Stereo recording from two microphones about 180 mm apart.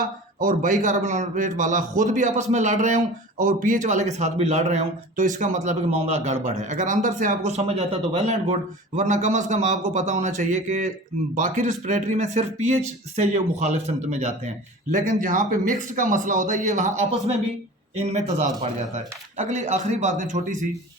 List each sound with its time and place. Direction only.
0.0 s a man's voice: 50° right (ahead or behind)